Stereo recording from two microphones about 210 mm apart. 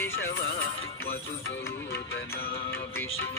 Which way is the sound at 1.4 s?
65° left (ahead or behind).